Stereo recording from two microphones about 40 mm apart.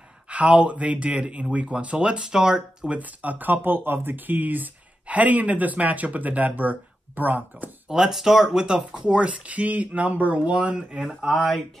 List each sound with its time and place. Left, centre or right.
0.3 s speech: right
3.0 s speech: right
3.6 s speech: right
7.9 s speech: centre; by 10.8 s right
11.2 s speech: centre